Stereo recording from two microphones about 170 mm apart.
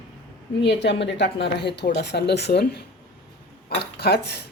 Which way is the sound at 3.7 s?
75° left (ahead or behind).